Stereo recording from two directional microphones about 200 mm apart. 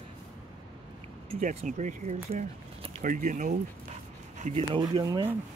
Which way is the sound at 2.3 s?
30° right (ahead or behind).